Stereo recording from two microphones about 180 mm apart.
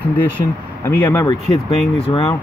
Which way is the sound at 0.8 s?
10° left (ahead or behind).